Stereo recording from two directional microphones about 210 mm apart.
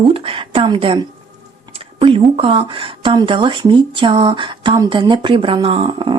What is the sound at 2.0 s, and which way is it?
A woman's voice, 25° right (ahead or behind).